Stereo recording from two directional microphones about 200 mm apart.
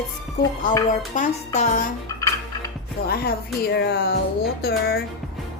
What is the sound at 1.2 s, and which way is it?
Speech, 40° left (ahead or behind).